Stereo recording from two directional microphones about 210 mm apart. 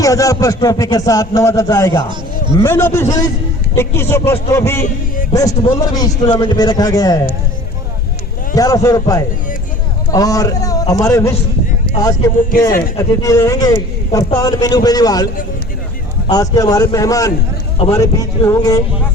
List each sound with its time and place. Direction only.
0.0 s a man's voice: 15° left (ahead or behind)
8.5 s speech: 15° left (ahead or behind)
13.0 s speech: 15° left (ahead or behind)